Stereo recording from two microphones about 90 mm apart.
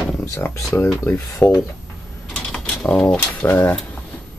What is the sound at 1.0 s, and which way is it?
Speech, 25° left (ahead or behind).